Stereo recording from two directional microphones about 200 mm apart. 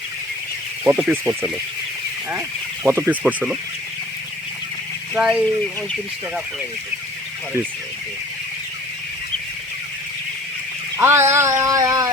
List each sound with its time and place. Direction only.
0.9 s speech: centre (ahead or behind)
3.1 s cat: 5° right (ahead or behind)
5.1 s speech: 5° right (ahead or behind)
10.9 s cat: 10° right (ahead or behind)